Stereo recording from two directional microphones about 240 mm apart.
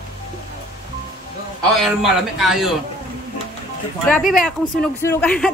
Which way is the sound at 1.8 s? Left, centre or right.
Centre.